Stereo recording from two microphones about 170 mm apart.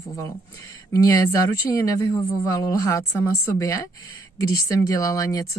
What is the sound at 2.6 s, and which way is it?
Speech, 15° left (ahead or behind).